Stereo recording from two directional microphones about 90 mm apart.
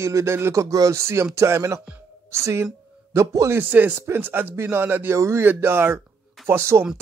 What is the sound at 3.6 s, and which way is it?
A man's voice, 20° right (ahead or behind).